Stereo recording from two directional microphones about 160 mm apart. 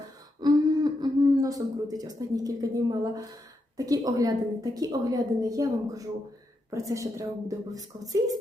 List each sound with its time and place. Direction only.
0.4 s throat clearing: 25° right (ahead or behind)
3.8 s a woman's voice: 20° right (ahead or behind)